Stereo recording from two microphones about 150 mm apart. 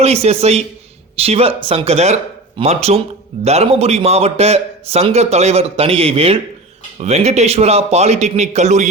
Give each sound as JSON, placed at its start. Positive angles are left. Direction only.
{"t": 0.0, "sound": "a man's voice", "side_deg": -45}